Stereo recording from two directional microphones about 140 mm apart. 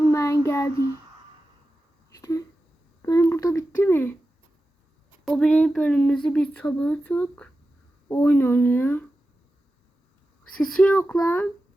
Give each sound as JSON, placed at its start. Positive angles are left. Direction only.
{"t": 0.0, "sound": "child singing", "side_deg": 20}
{"t": 2.0, "sound": "a sound", "side_deg": 20}
{"t": 5.2, "sound": "speech", "side_deg": 5}
{"t": 10.6, "sound": "speech", "side_deg": 5}